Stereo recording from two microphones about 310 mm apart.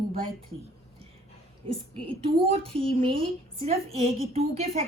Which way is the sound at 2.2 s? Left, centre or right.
Centre.